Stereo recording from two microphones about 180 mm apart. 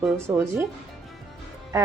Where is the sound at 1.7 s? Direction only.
15° right (ahead or behind).